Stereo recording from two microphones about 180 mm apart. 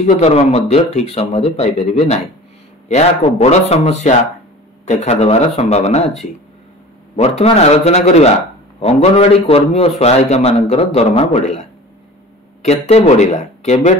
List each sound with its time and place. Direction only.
0.0 s a man's voice: 40° left (ahead or behind)
7.2 s a man's voice: 35° left (ahead or behind)
12.6 s a man's voice: 35° left (ahead or behind)